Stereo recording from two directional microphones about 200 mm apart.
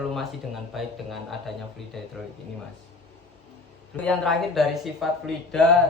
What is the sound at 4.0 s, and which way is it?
Speech, centre (ahead or behind).